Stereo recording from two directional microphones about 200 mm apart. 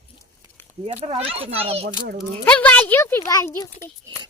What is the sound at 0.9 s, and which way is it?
A child's voice, 30° right (ahead or behind).